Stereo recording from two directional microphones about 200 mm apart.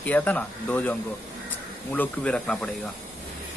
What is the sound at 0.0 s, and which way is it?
Speech, 5° left (ahead or behind).